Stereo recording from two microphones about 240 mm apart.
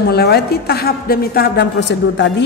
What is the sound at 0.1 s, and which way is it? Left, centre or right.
A woman's voice, left.